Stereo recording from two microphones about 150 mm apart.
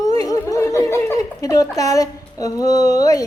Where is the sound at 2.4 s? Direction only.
25° left (ahead or behind).